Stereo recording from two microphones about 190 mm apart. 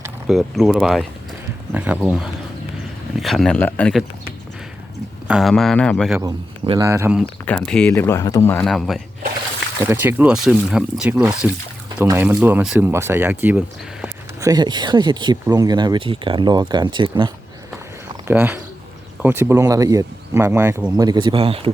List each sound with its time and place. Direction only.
0.3 s speech: centre (ahead or behind)
5.3 s speech: centre (ahead or behind)
6.7 s speech: 15° right (ahead or behind)
7.4 s speech: 5° left (ahead or behind)
8.4 s speech: 5° left (ahead or behind)
9.9 s speech: 10° right (ahead or behind)
18.3 s speech: 10° right (ahead or behind); by 21.7 s 30° right (ahead or behind)